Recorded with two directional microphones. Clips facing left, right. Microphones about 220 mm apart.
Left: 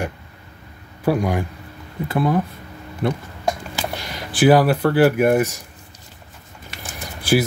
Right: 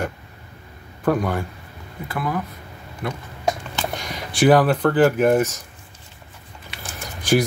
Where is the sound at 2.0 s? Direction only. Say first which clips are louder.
Left 6 dB; 25° left (ahead or behind).